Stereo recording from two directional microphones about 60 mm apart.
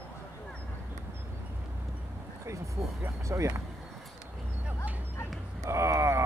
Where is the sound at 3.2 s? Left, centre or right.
Right.